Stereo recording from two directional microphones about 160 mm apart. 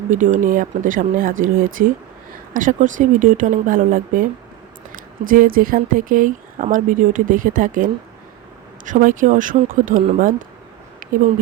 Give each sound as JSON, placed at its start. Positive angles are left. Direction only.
{"t": 0.1, "sound": "speech", "side_deg": -55}
{"t": 8.9, "sound": "speech", "side_deg": -55}